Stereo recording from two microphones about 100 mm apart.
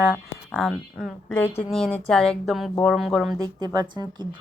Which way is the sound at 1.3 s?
20° left (ahead or behind).